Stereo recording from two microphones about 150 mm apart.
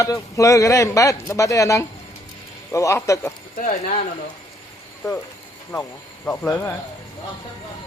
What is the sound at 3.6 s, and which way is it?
Speech, 60° left (ahead or behind).